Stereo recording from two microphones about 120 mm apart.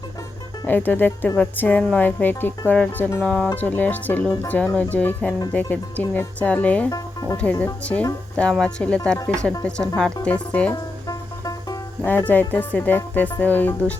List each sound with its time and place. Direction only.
0.6 s speech: 15° left (ahead or behind)
6.9 s speech: 30° left (ahead or behind)
7.6 s speech: 10° left (ahead or behind)
10.7 s music: 30° left (ahead or behind)
12.0 s speech: 15° left (ahead or behind)